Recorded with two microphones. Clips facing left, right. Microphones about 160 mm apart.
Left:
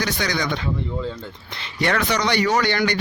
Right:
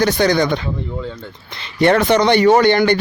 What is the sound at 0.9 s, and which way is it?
Speech, centre (ahead or behind).